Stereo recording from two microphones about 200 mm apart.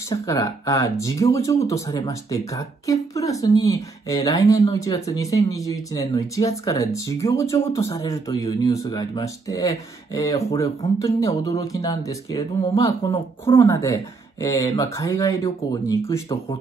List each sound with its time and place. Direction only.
0.1 s speech: 20° left (ahead or behind)